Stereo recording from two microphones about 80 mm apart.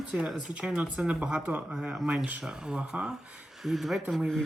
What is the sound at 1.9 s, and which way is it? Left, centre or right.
Speech, centre.